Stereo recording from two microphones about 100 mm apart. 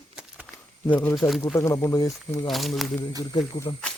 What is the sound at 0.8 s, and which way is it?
Speech, 20° left (ahead or behind).